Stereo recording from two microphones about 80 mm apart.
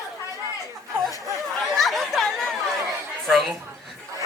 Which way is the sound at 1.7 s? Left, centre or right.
Centre.